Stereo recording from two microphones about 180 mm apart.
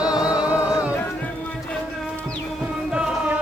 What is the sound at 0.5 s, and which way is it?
Music, 20° left (ahead or behind).